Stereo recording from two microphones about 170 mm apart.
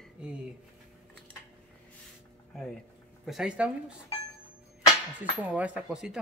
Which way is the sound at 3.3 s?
5° right (ahead or behind).